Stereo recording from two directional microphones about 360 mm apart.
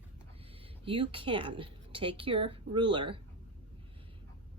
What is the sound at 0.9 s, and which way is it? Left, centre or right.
A woman's voice, centre.